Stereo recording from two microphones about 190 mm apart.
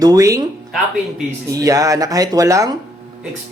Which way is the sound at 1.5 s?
20° right (ahead or behind).